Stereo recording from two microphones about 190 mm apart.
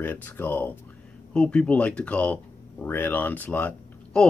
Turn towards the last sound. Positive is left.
turn(degrees=10)  # may be behind; listen again after turning